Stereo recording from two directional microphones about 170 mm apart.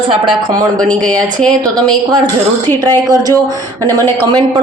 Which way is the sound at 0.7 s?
5° left (ahead or behind).